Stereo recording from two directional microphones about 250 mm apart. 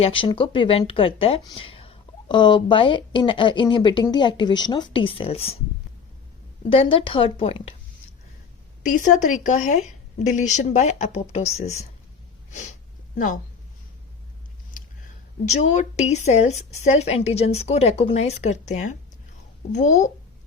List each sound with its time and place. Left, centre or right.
0.0 s speech: left
6.7 s speech: left
8.8 s speech: left
12.5 s sneeze: left
13.1 s speech: left
15.4 s speech: left